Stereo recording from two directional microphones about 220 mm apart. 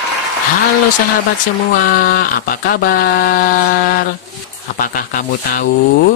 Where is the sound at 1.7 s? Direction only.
40° left (ahead or behind).